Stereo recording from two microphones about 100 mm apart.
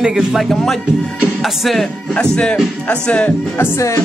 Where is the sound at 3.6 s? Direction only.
30° left (ahead or behind).